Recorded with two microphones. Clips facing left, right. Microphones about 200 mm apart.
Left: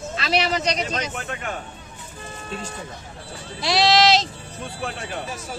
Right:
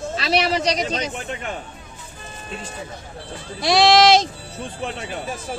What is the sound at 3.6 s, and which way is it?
Speech, 50° right (ahead or behind).